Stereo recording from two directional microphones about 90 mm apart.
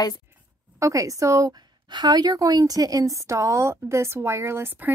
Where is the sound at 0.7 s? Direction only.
35° right (ahead or behind).